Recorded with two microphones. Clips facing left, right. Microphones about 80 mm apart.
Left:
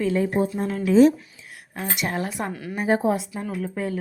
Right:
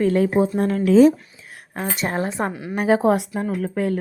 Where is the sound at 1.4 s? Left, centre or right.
Right.